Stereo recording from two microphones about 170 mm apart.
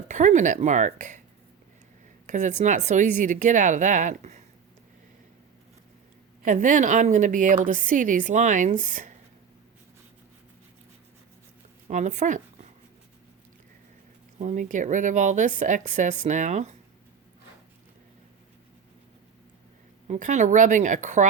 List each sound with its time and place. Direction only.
0.1 s a woman's voice: 45° right (ahead or behind)
2.2 s a woman's voice: 45° right (ahead or behind)
6.4 s a woman's voice: 50° right (ahead or behind)
11.9 s a woman's voice: 45° right (ahead or behind)
14.3 s a woman's voice: 45° right (ahead or behind)
20.1 s a woman's voice: 45° right (ahead or behind)